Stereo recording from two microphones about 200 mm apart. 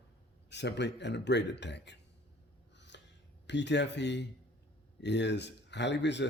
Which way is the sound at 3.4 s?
60° left (ahead or behind).